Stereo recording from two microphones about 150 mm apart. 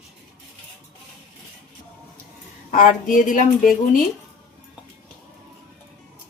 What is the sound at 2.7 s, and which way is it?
A woman's voice, 65° left (ahead or behind).